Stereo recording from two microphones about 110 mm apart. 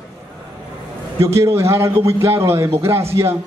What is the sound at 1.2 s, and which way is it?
A man's voice, 25° right (ahead or behind).